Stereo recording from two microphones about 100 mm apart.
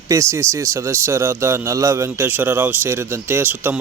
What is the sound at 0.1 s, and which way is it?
A man's voice, 30° right (ahead or behind).